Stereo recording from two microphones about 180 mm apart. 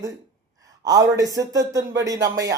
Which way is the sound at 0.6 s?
20° right (ahead or behind).